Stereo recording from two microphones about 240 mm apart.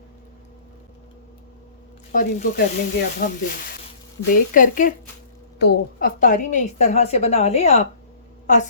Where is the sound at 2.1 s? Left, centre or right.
Left.